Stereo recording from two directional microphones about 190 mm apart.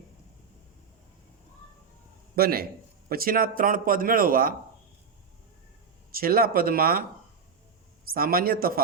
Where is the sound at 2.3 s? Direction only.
50° right (ahead or behind).